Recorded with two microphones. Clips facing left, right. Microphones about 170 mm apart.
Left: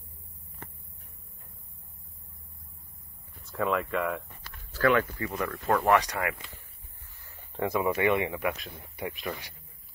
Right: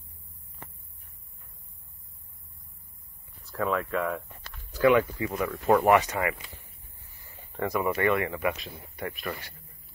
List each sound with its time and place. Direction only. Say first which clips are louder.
3.4 s speech: even; centre (ahead or behind)
4.4 s speech: right 5 dB; 15° right (ahead or behind)
7.2 s a sound: right 2 dB; 15° right (ahead or behind)
7.5 s speech: even; 20° left (ahead or behind)
8.3 s speech: right 2 dB; centre (ahead or behind)
8.9 s speech: even; 15° left (ahead or behind)